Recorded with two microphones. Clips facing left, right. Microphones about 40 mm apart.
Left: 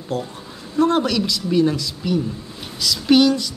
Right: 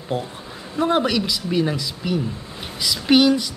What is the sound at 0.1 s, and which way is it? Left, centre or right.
A woman's voice, right.